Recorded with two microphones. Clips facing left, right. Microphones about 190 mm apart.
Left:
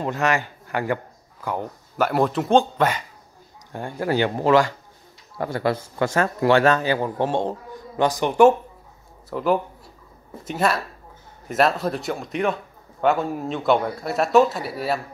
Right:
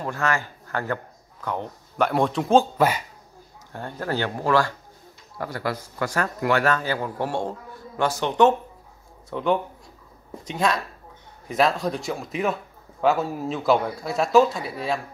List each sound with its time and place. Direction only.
0.0 s a man's voice: 20° left (ahead or behind); by 3.0 s 5° right (ahead or behind)
3.7 s speech: 10° left (ahead or behind)